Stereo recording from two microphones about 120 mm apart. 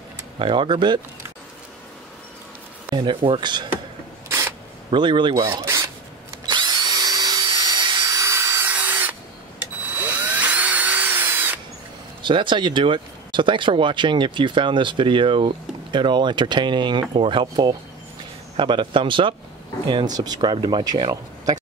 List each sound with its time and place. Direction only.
0.4 s speech: 45° right (ahead or behind)
2.9 s speech: 40° right (ahead or behind)
4.3 s a sound: 20° right (ahead or behind)
4.9 s speech: 40° right (ahead or behind)
5.5 s speech: 20° right (ahead or behind)
6.4 s drill: 40° right (ahead or behind); by 8.7 s 25° right (ahead or behind)
8.7 s tools: 15° right (ahead or behind)
9.6 s drill: 15° right (ahead or behind)
12.2 s a man's voice: 40° right (ahead or behind)
18.6 s a man's voice: 45° right (ahead or behind)